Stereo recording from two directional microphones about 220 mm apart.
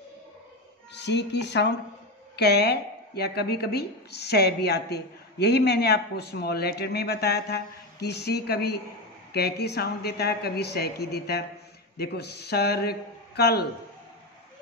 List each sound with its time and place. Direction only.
0.9 s a woman's voice: 50° left (ahead or behind)